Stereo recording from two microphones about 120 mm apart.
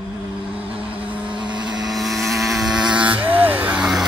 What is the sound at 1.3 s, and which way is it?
Vehicle, 40° right (ahead or behind).